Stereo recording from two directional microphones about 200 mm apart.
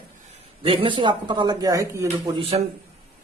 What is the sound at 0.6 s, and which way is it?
A man's voice, 25° right (ahead or behind).